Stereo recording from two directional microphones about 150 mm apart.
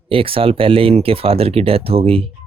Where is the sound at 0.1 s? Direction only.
40° right (ahead or behind).